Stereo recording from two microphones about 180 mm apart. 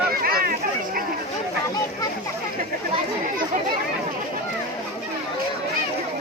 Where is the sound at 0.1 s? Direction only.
55° right (ahead or behind).